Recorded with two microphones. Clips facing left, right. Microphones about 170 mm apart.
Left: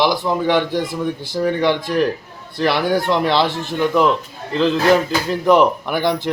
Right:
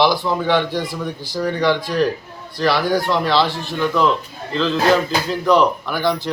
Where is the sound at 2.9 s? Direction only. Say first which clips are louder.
Left 1 dB; 20° left (ahead or behind).